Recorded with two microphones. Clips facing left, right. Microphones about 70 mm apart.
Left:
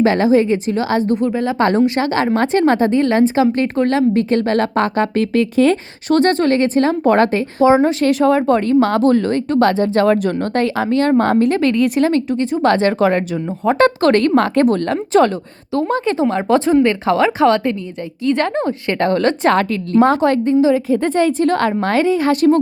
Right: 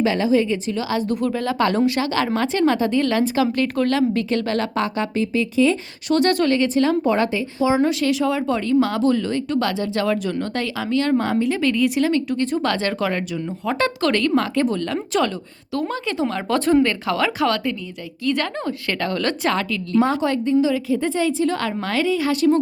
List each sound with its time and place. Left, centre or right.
0.0 s a woman's voice: left
1.2 s a woman's voice: left
6.1 s a woman's voice: left
11.3 s speech: left
12.3 s speech: left
12.6 s a woman's voice: left
15.1 s a woman's voice: left
16.3 s a woman's voice: left
20.9 s speech: left
21.7 s a woman's voice: left